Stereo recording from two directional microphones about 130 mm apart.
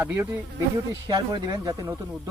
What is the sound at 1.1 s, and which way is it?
Speech, 35° right (ahead or behind).